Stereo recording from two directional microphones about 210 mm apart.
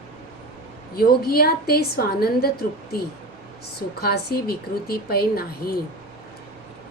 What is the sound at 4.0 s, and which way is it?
Speech, 50° left (ahead or behind).